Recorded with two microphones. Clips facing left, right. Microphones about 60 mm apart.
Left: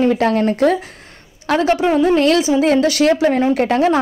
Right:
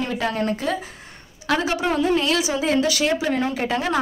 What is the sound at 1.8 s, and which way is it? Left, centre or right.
Speech, centre.